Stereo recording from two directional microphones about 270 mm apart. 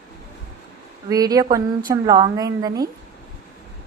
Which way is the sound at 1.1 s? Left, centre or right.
Centre.